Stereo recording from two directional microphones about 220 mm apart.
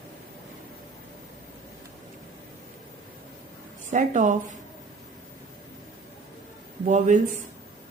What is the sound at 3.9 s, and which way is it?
Speech, 35° right (ahead or behind).